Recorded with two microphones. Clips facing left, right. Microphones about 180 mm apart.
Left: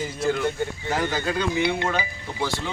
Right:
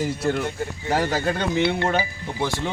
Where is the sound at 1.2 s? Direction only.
55° right (ahead or behind).